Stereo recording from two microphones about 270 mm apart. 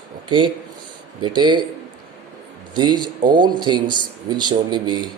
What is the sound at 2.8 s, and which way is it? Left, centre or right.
Speech, centre.